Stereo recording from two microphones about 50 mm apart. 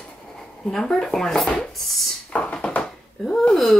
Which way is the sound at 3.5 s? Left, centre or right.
Centre.